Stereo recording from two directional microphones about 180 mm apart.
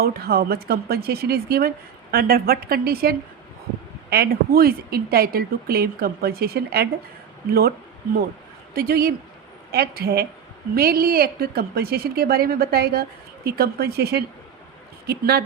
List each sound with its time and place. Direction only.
0.0 s a woman's voice: 60° right (ahead or behind)
8.7 s a woman's voice: 55° right (ahead or behind)